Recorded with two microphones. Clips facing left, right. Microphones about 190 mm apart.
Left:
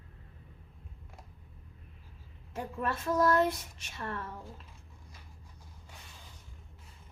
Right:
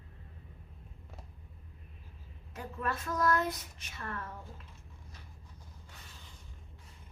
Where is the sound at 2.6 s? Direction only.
30° left (ahead or behind).